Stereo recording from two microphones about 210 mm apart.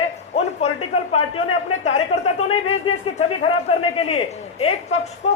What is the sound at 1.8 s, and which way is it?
Speech, 30° left (ahead or behind).